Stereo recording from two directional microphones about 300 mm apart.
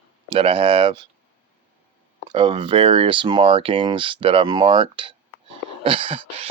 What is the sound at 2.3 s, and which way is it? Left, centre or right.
Speech, centre.